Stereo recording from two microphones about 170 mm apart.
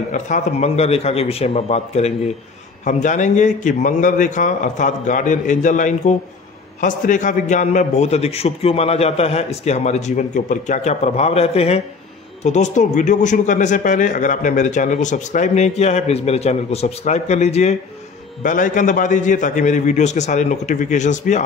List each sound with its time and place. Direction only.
0.1 s a man's voice: 45° left (ahead or behind)